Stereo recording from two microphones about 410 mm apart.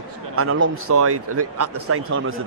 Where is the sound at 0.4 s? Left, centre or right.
Right.